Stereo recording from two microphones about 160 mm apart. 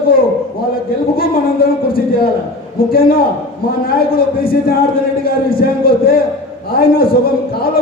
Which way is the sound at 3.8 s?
65° left (ahead or behind).